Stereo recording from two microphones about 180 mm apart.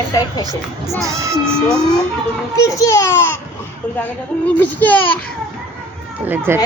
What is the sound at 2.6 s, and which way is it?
Speech, 15° left (ahead or behind).